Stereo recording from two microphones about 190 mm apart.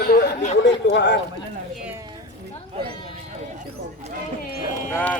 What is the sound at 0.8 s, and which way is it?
Speech, 70° left (ahead or behind).